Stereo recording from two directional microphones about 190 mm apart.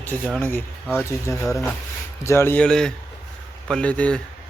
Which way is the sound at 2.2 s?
15° left (ahead or behind).